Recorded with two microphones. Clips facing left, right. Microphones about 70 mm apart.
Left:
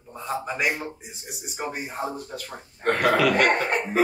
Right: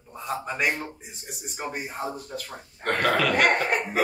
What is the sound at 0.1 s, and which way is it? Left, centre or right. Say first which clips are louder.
A man's voice: left 1 dB; centre.